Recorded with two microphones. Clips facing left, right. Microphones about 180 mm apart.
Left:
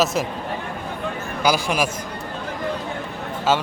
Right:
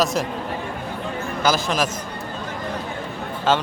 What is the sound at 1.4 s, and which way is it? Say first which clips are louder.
Speech: left 1 dB; 10° left (ahead or behind).